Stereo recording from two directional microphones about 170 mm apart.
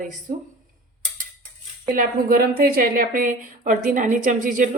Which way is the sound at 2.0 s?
60° right (ahead or behind).